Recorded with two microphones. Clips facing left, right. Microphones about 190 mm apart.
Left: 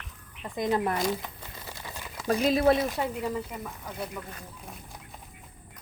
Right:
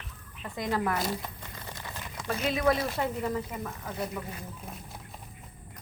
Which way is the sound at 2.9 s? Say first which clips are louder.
Even; 10° left (ahead or behind).